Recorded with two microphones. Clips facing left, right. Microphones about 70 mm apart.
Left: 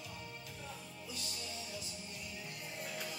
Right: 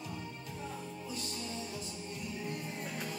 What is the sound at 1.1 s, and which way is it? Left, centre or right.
Music, right.